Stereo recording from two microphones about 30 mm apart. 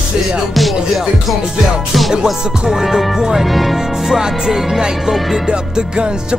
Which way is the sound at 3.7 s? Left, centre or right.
Centre.